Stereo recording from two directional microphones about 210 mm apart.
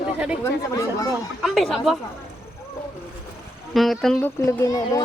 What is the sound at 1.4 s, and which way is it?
Speech, centre (ahead or behind).